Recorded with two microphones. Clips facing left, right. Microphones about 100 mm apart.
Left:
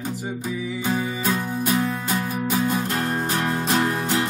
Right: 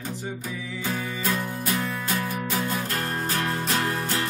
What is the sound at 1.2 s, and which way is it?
Music, 20° left (ahead or behind).